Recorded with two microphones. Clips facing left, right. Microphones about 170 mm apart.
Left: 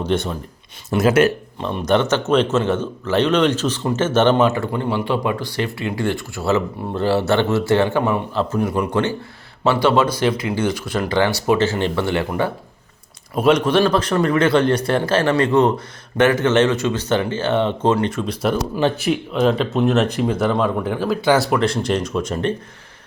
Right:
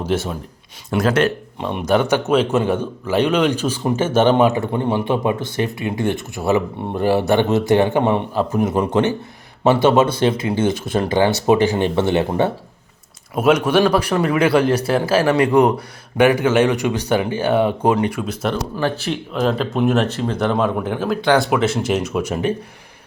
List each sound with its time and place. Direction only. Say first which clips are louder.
0.0 s speech: even; 5° right (ahead or behind)
0.9 s speech: left 2 dB; 5° left (ahead or behind)
1.5 s a man's voice: right 2 dB; 10° right (ahead or behind)
13.3 s a man's voice: even; 5° right (ahead or behind)
19.0 s speech: left 3 dB; centre (ahead or behind)
20.1 s speech: left 1 dB; 15° left (ahead or behind)
20.5 s speech: even; centre (ahead or behind)